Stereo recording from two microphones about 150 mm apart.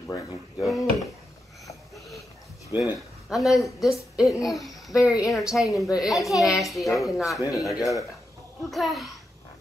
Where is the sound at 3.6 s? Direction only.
Centre (ahead or behind).